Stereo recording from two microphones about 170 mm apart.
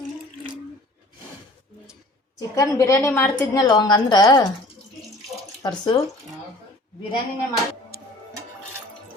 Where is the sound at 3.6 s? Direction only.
25° left (ahead or behind).